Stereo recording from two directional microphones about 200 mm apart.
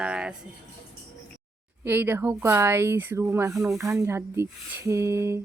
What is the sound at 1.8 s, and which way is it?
Speech, 10° right (ahead or behind).